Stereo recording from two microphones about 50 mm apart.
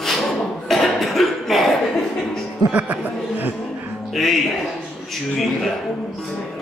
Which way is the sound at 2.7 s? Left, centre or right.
Right.